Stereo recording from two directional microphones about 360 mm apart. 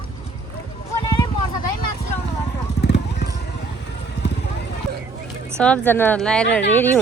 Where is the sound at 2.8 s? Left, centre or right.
Left.